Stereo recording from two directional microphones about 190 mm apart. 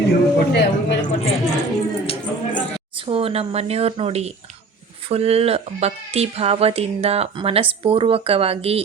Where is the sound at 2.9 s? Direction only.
30° right (ahead or behind).